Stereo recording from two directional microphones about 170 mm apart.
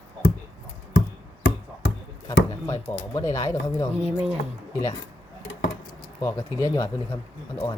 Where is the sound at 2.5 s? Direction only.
15° left (ahead or behind).